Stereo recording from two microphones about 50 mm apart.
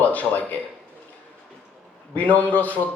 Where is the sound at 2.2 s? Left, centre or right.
Left.